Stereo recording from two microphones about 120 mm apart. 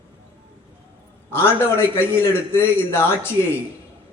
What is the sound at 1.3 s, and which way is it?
A man's voice, 20° left (ahead or behind).